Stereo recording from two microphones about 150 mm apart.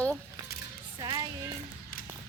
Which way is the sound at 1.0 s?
30° right (ahead or behind).